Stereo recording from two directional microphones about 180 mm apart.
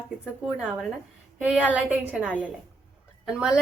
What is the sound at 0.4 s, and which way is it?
A woman's voice, 5° right (ahead or behind).